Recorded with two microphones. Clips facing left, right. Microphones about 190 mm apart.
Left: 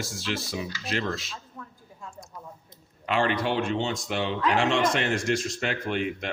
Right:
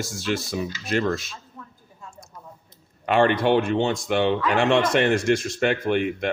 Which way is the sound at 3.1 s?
55° right (ahead or behind).